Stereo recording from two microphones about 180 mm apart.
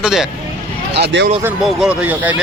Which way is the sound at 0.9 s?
70° right (ahead or behind).